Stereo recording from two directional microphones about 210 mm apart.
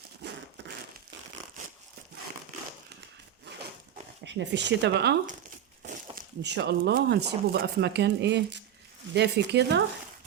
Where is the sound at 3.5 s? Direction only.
55° right (ahead or behind).